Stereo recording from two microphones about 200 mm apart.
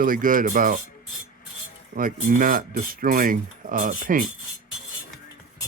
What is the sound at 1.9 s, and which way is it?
Speech, 45° right (ahead or behind).